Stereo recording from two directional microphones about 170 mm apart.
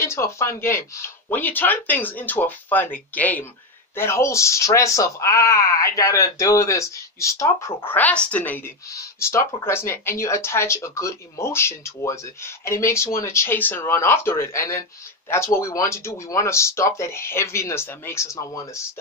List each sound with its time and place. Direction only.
0.0 s speech: 15° left (ahead or behind)